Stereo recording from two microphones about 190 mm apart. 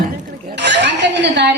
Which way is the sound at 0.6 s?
65° right (ahead or behind).